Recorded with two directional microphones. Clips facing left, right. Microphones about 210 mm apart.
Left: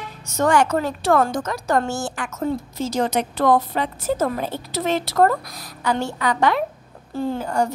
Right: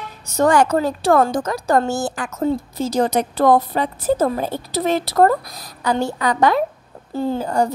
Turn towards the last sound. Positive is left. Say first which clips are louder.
# right 3 dB
turn(degrees=-35)  # may be behind; listen again after turning